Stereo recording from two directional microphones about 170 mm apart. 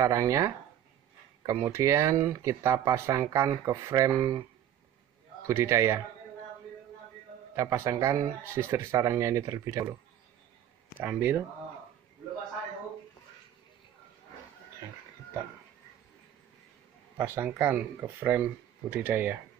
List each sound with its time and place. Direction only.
0.0 s speech: 20° right (ahead or behind)
5.5 s speech: 15° right (ahead or behind)
7.5 s speech: 15° right (ahead or behind)
11.1 s speech: 15° right (ahead or behind)
17.2 s speech: 10° right (ahead or behind)